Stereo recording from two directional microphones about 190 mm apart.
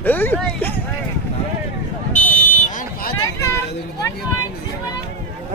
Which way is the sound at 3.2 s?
15° left (ahead or behind).